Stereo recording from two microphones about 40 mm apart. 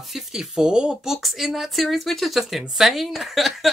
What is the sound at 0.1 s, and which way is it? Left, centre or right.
Speech, centre.